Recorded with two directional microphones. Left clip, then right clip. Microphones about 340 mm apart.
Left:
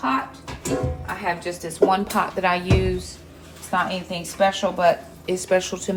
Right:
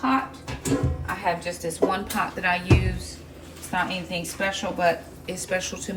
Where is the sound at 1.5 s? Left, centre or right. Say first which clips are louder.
Left 5 dB; centre.